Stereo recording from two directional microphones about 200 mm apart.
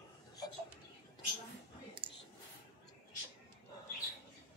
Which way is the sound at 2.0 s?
25° right (ahead or behind).